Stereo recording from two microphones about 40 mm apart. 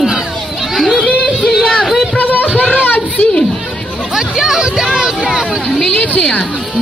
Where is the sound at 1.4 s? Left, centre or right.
Centre.